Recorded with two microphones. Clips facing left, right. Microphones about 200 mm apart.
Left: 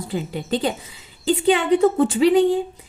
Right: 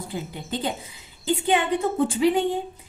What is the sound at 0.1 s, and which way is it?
A woman's voice, 80° left.